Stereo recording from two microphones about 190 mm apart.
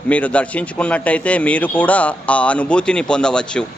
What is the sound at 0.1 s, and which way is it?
A man's voice, 5° left (ahead or behind).